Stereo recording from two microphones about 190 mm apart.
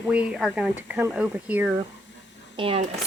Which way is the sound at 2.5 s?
30° right (ahead or behind).